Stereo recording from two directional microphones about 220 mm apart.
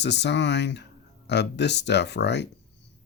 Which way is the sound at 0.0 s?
50° left (ahead or behind).